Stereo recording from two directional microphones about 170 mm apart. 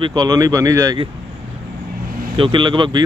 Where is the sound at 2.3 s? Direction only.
30° right (ahead or behind).